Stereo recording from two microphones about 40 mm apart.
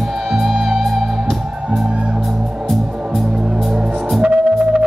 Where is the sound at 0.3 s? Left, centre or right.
Centre.